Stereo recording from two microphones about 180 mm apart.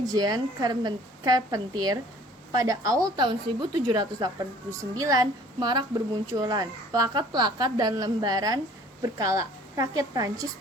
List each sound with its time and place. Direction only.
0.1 s a woman's voice: 20° right (ahead or behind)